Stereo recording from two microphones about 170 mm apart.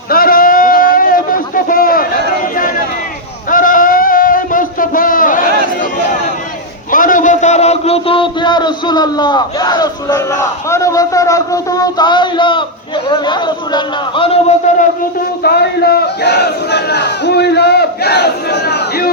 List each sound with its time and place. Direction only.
0.1 s a sound: 60° left (ahead or behind)
6.9 s a man's voice: 50° left (ahead or behind); by 14.5 s 30° left (ahead or behind)
15.4 s battle cry: 70° left (ahead or behind)